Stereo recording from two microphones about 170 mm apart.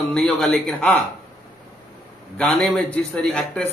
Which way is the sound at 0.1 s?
5° left (ahead or behind).